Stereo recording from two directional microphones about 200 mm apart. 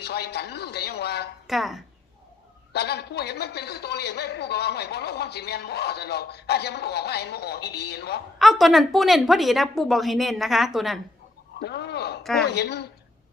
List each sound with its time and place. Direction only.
0.0 s a man's voice: 55° left (ahead or behind)
1.5 s a woman's voice: centre (ahead or behind)
2.7 s a man's voice: 55° left (ahead or behind)
8.4 s a woman's voice: centre (ahead or behind)
11.6 s a man's voice: 55° left (ahead or behind)